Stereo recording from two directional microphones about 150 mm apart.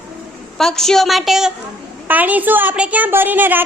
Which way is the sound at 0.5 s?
Centre (ahead or behind).